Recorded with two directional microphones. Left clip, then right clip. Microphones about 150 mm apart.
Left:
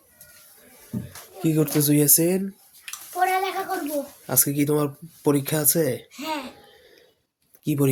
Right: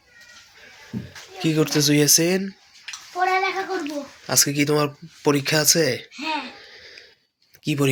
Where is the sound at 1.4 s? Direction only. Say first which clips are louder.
Right 2 dB; 10° left (ahead or behind).